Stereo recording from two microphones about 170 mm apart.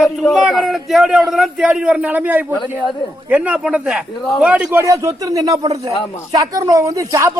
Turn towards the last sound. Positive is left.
turn(degrees=-20)  # may be behind; listen again after turning